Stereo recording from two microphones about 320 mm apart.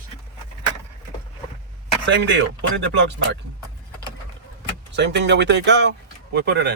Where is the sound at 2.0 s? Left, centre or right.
Right.